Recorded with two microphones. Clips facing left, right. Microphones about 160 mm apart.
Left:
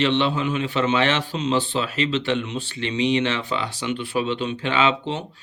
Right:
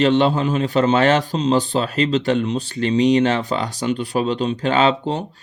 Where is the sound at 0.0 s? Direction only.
40° right (ahead or behind).